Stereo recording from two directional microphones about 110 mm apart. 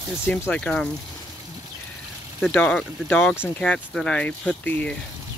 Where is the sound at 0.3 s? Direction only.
10° left (ahead or behind).